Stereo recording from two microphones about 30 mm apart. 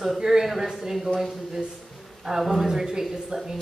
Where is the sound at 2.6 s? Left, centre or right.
Centre.